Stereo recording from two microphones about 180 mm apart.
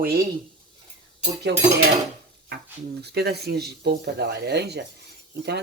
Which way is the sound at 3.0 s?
65° right (ahead or behind).